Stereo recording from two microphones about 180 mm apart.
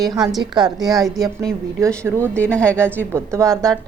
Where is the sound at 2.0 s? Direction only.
15° right (ahead or behind).